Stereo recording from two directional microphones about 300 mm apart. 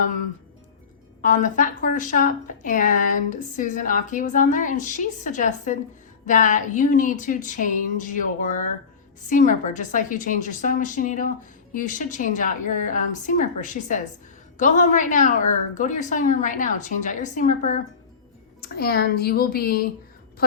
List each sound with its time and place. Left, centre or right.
1.2 s a woman's voice: left